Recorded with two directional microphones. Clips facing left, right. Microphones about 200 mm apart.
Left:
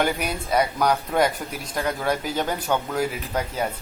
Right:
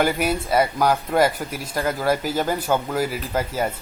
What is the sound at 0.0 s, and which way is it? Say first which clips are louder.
Speech: right 3 dB; 5° right (ahead or behind).